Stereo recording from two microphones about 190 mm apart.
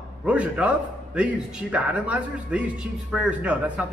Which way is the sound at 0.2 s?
5° right (ahead or behind).